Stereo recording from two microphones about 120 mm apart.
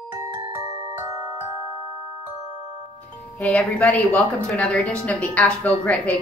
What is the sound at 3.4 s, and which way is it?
A woman's voice, 10° left (ahead or behind).